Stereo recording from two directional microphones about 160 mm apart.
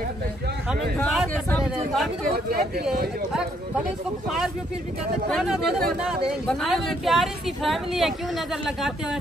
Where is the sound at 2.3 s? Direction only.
75° right (ahead or behind).